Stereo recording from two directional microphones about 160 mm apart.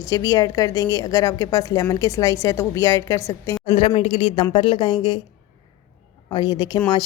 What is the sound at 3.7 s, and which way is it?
A woman's voice, 40° left (ahead or behind).